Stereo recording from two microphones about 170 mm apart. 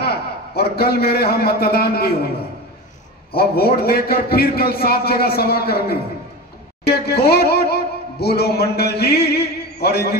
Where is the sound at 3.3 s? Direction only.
65° left (ahead or behind).